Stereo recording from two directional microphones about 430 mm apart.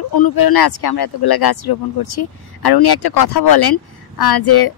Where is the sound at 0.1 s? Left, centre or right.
Left.